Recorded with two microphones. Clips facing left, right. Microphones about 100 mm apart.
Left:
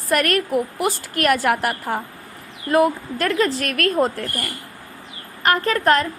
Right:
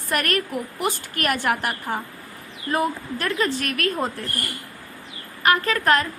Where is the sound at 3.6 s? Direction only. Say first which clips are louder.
Left 3 dB; 50° left (ahead or behind).